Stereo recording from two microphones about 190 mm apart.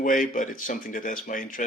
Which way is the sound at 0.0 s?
45° left (ahead or behind).